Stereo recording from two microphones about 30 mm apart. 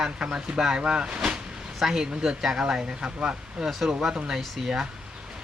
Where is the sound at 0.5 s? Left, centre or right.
Right.